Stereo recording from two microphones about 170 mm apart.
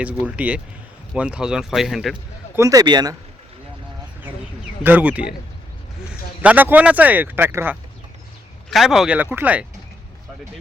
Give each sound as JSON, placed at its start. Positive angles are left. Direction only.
{"t": 0.0, "sound": "speech", "side_deg": -10}
{"t": 2.6, "sound": "speech", "side_deg": -20}
{"t": 4.8, "sound": "speech", "side_deg": -10}
{"t": 6.4, "sound": "speech", "side_deg": -10}